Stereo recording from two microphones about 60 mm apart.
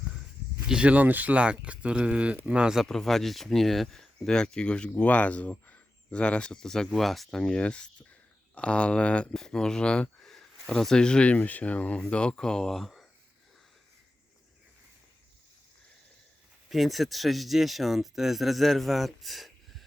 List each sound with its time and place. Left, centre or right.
0.7 s speech: centre
2.8 s speech: centre
9.3 s speech: centre
16.6 s speech: centre